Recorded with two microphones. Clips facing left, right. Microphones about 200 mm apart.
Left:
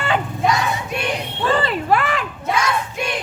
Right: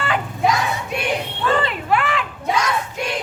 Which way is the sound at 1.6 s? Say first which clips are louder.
Left 2 dB; 40° left (ahead or behind).